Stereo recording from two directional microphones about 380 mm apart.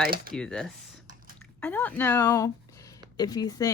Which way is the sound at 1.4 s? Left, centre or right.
Centre.